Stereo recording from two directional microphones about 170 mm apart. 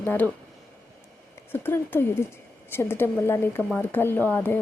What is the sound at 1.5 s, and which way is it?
Speech, 10° left (ahead or behind).